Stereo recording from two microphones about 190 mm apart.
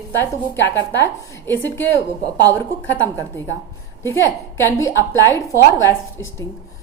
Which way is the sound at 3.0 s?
10° left (ahead or behind).